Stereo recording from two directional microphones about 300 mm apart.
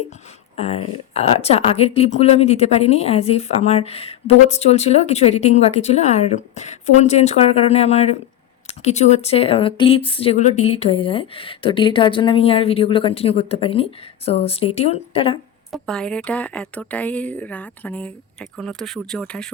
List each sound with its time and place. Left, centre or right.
0.5 s a woman's voice: left
15.7 s speech: centre